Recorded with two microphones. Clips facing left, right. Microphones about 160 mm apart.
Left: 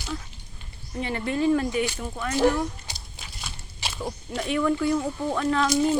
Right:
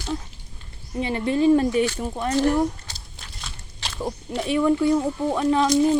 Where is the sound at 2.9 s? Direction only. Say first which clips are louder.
Left 1 dB; 5° left (ahead or behind).